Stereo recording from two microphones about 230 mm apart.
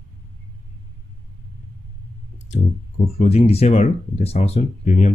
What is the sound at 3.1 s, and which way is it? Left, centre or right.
Speech, left.